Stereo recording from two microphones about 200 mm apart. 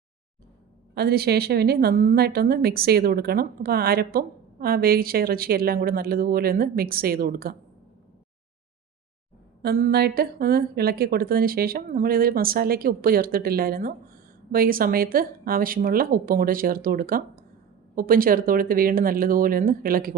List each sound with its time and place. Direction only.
0.9 s a woman's voice: 50° right (ahead or behind)
9.6 s a woman's voice: 50° right (ahead or behind)